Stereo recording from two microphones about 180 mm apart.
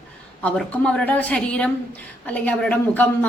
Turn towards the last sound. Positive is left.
turn(degrees=10)  # may be behind; listen again after turning